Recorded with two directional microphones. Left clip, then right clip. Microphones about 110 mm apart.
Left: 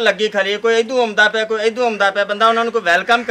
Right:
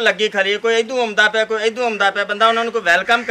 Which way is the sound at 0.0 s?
Centre (ahead or behind).